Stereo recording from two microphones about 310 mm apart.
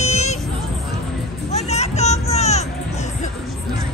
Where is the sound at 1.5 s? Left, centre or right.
Left.